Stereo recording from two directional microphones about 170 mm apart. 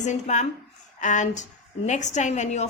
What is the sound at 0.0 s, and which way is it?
A woman's voice, 45° left (ahead or behind).